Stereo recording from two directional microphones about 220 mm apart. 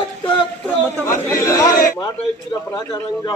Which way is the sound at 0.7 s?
10° left (ahead or behind).